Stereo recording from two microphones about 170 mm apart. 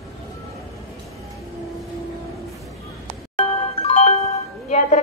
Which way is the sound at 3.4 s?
35° left (ahead or behind).